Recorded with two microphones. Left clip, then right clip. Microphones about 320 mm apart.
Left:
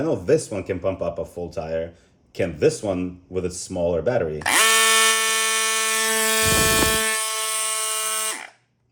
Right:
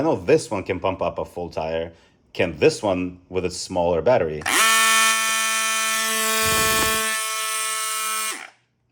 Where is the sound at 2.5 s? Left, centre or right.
Centre.